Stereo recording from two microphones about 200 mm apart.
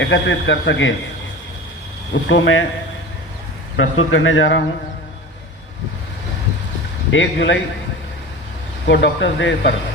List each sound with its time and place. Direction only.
0.0 s a man's voice: 65° left (ahead or behind)
2.2 s speech: 65° left (ahead or behind)
3.8 s a man's voice: 85° left
7.1 s a man's voice: 65° left (ahead or behind)
8.9 s a man's voice: 60° left (ahead or behind)